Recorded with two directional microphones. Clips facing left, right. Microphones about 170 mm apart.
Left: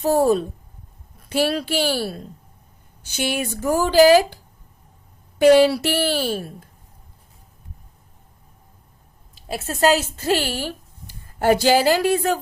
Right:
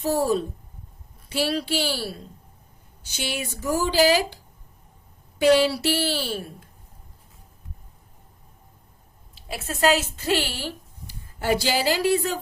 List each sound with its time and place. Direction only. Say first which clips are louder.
0.0 s speech: left 5 dB; 50° left (ahead or behind)
5.4 s speech: left 5 dB; 50° left (ahead or behind)
9.3 s a woman's voice: left 4 dB; 40° left (ahead or behind)